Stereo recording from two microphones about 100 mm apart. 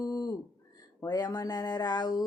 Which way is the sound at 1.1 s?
40° left (ahead or behind).